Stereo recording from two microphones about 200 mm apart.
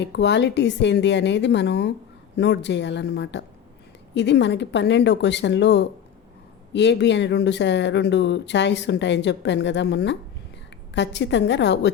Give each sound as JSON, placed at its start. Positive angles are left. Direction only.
{"t": 0.0, "sound": "speech", "side_deg": 60}